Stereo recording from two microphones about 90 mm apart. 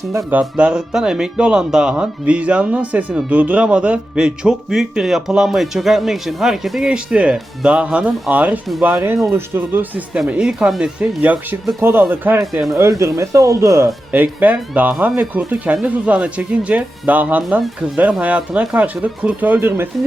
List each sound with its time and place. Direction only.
0.3 s speech: 15° right (ahead or behind)
8.9 s speech: 30° right (ahead or behind)
10.2 s speech: 10° right (ahead or behind)
11.8 s speech: 25° right (ahead or behind)
12.7 s speech: 35° right (ahead or behind)
14.1 s speech: 20° right (ahead or behind)